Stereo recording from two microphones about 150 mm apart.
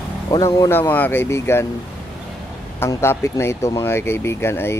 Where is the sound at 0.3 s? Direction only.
25° left (ahead or behind).